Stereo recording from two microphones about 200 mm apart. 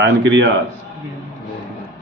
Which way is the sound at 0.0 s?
65° right (ahead or behind).